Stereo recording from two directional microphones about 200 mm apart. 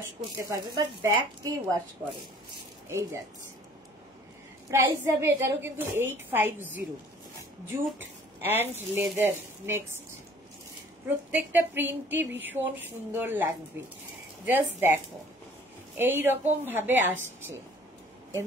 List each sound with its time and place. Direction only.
0.4 s a woman's voice: 15° right (ahead or behind)
4.6 s a woman's voice: 15° right (ahead or behind)
8.0 s speech: 10° right (ahead or behind)
11.3 s a woman's voice: 10° right (ahead or behind)
16.0 s a woman's voice: 10° right (ahead or behind)